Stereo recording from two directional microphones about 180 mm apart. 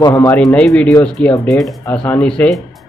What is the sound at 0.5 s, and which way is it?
Speech, 5° left (ahead or behind).